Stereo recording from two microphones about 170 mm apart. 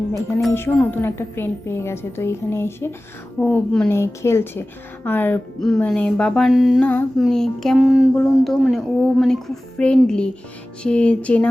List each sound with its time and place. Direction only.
0.5 s a woman's voice: 10° left (ahead or behind); by 8.0 s 5° right (ahead or behind)
8.1 s a woman's voice: 5° left (ahead or behind)